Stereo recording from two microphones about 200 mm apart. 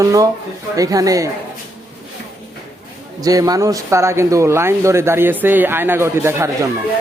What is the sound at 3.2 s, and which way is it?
Speech, 20° right (ahead or behind).